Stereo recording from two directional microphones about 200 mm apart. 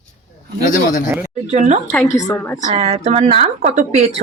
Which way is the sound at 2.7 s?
30° right (ahead or behind).